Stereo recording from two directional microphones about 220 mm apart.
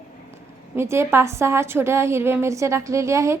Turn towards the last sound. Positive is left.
turn(degrees=-15)  # may be behind; listen again after turning